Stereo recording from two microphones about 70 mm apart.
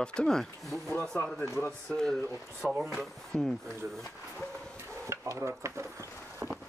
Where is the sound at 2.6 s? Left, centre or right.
Centre.